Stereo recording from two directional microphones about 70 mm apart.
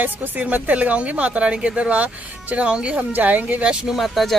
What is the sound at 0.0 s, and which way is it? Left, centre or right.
Speech, right.